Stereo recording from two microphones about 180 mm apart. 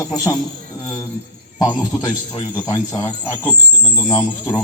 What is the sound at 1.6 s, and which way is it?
Speech, 25° left (ahead or behind).